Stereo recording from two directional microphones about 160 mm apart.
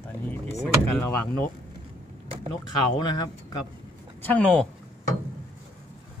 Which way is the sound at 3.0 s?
25° left (ahead or behind).